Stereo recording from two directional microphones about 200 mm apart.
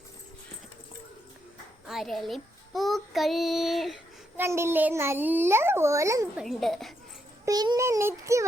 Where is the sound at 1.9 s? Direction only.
Centre (ahead or behind).